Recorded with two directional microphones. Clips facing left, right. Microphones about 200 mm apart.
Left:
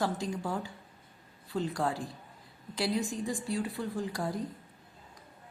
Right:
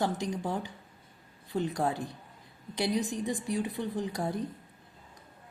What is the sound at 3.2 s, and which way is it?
A woman's voice, 20° right (ahead or behind).